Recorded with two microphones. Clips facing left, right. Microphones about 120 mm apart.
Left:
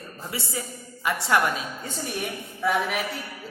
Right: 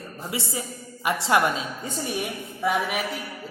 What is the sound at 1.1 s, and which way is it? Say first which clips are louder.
Speech: right 1 dB; 25° right (ahead or behind).